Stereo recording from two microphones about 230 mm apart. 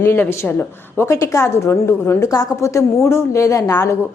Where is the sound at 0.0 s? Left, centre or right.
Centre.